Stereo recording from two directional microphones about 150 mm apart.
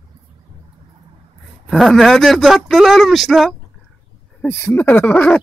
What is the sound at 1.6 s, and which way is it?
Speech, 5° left (ahead or behind).